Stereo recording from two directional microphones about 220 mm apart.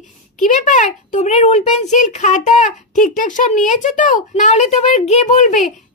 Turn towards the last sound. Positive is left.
turn(degrees=35)  # may be behind; listen again after turning